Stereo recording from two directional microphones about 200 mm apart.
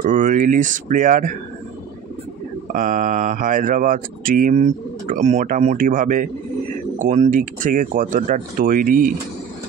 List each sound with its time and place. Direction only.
0.0 s speech: 40° right (ahead or behind)
2.7 s speech: 40° right (ahead or behind)